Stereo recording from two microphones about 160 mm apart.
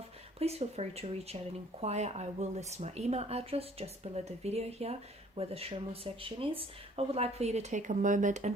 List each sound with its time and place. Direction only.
0.3 s speech: 40° right (ahead or behind)